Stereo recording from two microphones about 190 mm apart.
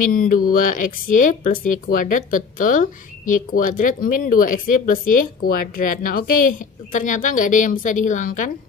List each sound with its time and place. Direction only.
0.1 s speech: 45° left (ahead or behind)